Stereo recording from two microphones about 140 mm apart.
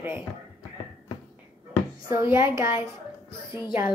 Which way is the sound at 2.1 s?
20° right (ahead or behind).